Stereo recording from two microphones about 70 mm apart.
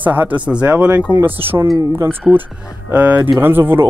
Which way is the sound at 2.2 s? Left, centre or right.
Centre.